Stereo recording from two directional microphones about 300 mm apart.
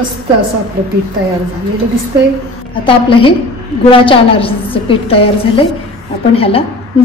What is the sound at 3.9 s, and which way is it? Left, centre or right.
A woman's voice, centre.